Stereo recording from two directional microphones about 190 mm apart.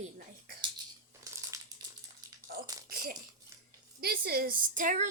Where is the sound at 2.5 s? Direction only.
55° right (ahead or behind).